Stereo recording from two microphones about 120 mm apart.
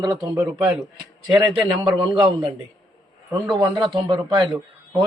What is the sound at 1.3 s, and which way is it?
A man's voice, 45° right (ahead or behind).